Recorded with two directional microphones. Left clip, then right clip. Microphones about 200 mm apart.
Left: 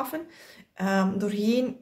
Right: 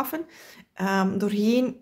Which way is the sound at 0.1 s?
35° right (ahead or behind).